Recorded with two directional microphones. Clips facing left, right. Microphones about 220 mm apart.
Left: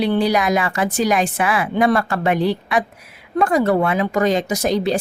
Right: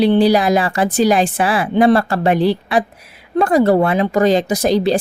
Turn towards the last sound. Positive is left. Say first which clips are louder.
# right 4 dB
turn(degrees=-35)  # may be behind; listen again after turning